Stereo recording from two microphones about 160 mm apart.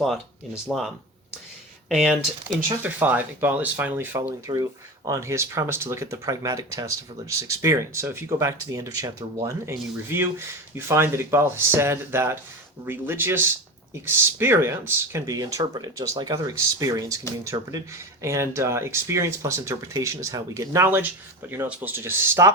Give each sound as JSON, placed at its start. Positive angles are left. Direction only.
{"t": 0.7, "sound": "speech", "side_deg": 0}